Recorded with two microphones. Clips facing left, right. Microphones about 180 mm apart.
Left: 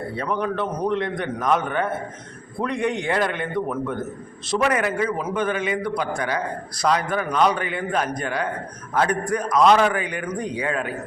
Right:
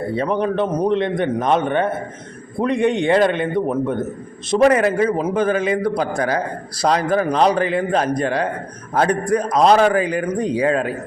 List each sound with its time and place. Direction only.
0.2 s a man's voice: 25° right (ahead or behind)